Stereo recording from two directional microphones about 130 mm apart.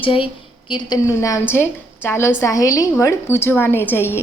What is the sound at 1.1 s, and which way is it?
Speech, 20° left (ahead or behind).